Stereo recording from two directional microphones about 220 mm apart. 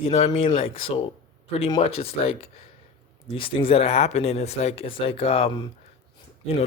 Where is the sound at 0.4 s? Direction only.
25° left (ahead or behind).